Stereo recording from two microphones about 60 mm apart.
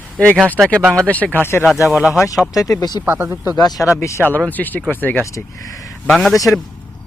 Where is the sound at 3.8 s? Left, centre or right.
Left.